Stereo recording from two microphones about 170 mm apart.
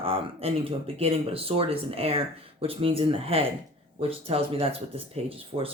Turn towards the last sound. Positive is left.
turn(degrees=-35)  # may be behind; listen again after turning